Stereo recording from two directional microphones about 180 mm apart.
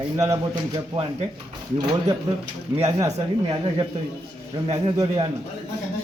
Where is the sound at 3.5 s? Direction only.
25° right (ahead or behind).